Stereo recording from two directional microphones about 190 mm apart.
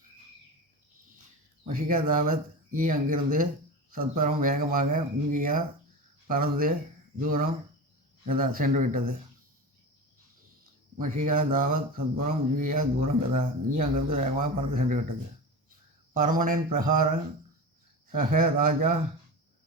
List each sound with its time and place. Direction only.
1.6 s speech: 50° right (ahead or behind)
10.9 s speech: 40° right (ahead or behind)
13.0 s speech: 35° right (ahead or behind)
14.3 s speech: 45° right (ahead or behind)
16.1 s speech: 45° right (ahead or behind)
18.1 s speech: 50° right (ahead or behind)